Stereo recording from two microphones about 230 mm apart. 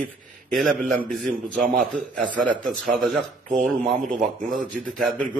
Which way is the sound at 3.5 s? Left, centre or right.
Right.